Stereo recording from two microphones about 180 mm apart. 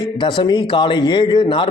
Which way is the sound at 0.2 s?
25° left (ahead or behind).